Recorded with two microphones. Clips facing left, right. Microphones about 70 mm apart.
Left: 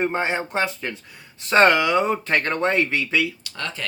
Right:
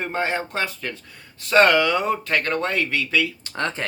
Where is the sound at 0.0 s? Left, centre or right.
Left.